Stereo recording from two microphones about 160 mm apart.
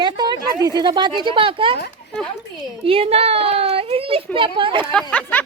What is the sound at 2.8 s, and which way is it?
Speech, 35° right (ahead or behind).